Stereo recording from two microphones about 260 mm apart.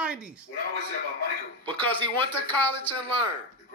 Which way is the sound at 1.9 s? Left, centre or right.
Centre.